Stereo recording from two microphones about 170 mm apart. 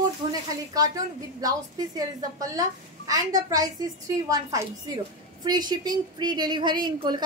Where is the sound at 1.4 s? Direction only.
20° right (ahead or behind).